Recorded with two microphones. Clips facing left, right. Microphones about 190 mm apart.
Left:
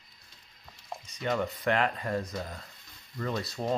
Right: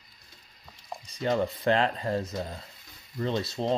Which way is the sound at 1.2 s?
30° right (ahead or behind).